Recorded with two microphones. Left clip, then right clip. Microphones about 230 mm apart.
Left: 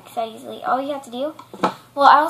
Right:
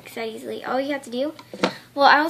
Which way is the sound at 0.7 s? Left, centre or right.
Right.